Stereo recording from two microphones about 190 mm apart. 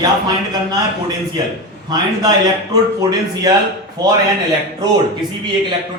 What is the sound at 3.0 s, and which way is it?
Speech, 20° right (ahead or behind).